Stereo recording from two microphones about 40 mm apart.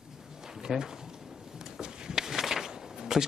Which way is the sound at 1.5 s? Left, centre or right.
Centre.